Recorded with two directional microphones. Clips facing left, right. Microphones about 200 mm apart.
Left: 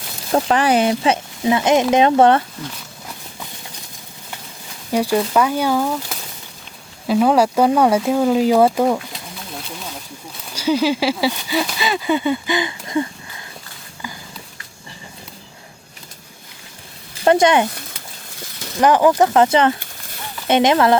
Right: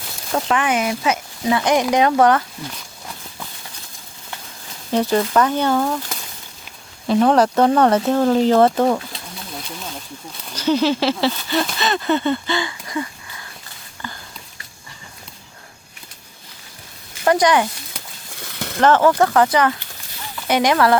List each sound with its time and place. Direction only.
0.3 s speech: 35° left (ahead or behind)
4.9 s speech: 10° left (ahead or behind)
9.6 s snake: centre (ahead or behind)
10.5 s speech: 10° left (ahead or behind)
14.0 s a sound: 10° left (ahead or behind)
17.2 s speech: 25° left (ahead or behind)
18.8 s speech: 15° left (ahead or behind)